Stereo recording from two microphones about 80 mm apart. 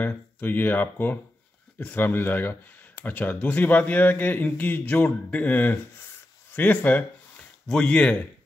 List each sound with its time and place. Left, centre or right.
0.0 s speech: left
7.6 s speech: centre